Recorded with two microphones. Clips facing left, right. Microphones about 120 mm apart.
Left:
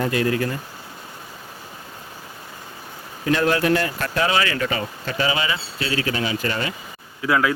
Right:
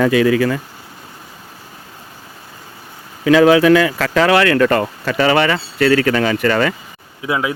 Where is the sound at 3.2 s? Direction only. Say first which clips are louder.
Right 9 dB; 90° right.